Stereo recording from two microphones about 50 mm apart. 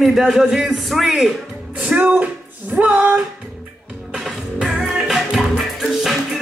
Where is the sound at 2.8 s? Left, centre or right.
Right.